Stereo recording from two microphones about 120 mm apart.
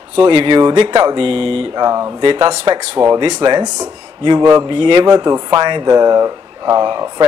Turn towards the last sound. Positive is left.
turn(degrees=-35)  # may be behind; listen again after turning